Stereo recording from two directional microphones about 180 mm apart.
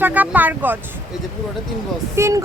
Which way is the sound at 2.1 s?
15° right (ahead or behind).